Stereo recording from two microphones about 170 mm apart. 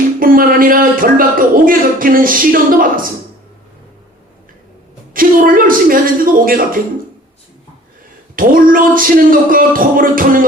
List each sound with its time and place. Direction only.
0.2 s speech: 55° right (ahead or behind)
5.1 s a sound: 55° right (ahead or behind)
6.4 s music: 55° right (ahead or behind)
8.4 s music: 55° right (ahead or behind)